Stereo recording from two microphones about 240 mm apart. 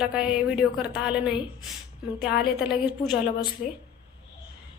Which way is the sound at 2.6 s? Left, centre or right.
Centre.